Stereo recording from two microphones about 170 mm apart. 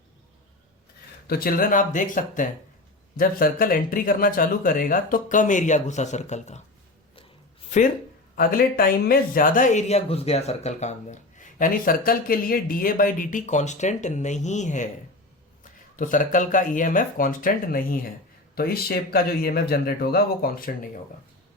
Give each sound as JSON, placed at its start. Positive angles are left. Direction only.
{"t": 1.3, "sound": "speech", "side_deg": 60}
{"t": 8.4, "sound": "speech", "side_deg": 60}